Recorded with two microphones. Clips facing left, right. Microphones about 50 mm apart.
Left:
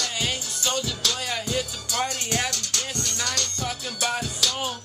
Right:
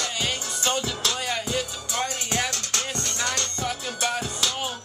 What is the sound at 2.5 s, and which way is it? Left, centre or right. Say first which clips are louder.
Music: right 1 dB; right.